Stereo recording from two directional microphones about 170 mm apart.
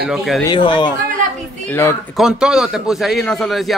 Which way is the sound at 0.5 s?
30° left (ahead or behind).